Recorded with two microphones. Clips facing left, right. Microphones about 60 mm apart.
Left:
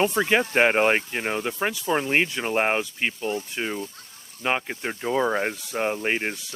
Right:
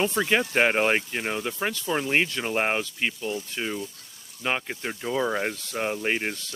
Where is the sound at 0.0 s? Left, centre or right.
Left.